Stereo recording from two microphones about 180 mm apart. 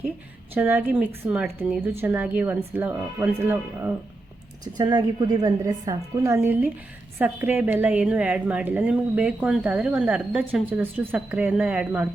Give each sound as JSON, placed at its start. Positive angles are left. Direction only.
{"t": 0.5, "sound": "a woman's voice", "side_deg": -10}
{"t": 4.6, "sound": "a woman's voice", "side_deg": -20}